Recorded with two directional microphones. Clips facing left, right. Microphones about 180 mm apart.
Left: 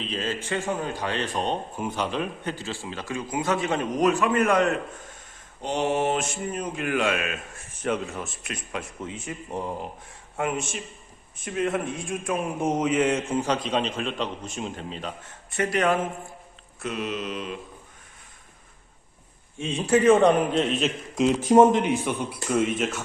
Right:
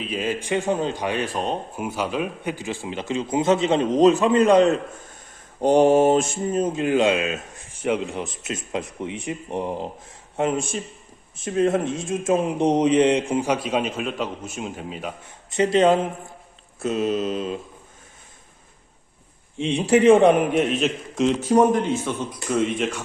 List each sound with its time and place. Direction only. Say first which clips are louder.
0.0 s a man's voice: right 4 dB; 10° right (ahead or behind)
5.5 s mantra: right 11 dB; 45° right (ahead or behind)
6.4 s a man's voice: right 7 dB; 25° right (ahead or behind)
19.9 s a man's voice: right 3 dB; 15° right (ahead or behind); by 21.4 s 5° left (ahead or behind)
21.4 s speech: left 2 dB; 25° left (ahead or behind); by 23.0 s centre (ahead or behind)